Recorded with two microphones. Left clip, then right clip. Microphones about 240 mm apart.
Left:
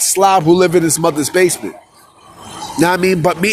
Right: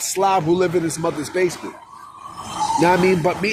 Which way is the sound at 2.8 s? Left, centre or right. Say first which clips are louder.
Left 5 dB; left.